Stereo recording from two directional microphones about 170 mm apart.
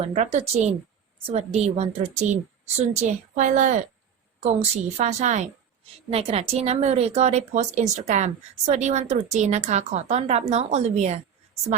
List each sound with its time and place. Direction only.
0.0 s a woman's voice: 40° right (ahead or behind)
4.9 s a woman's voice: 45° right (ahead or behind)